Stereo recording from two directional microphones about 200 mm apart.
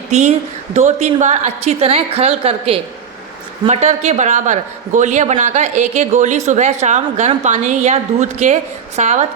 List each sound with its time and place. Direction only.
0.1 s a man's voice: 35° right (ahead or behind)